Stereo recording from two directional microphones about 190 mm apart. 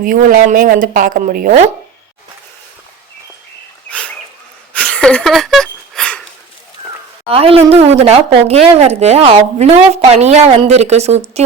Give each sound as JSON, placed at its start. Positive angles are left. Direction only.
{"t": 0.0, "sound": "a woman's voice", "side_deg": -45}
{"t": 4.7, "sound": "a sound", "side_deg": 5}
{"t": 7.3, "sound": "a woman's voice", "side_deg": -30}